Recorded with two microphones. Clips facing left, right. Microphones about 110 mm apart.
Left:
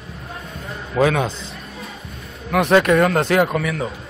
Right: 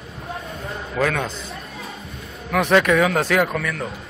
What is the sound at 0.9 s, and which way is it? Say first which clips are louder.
Speech: left 5 dB; 20° left (ahead or behind).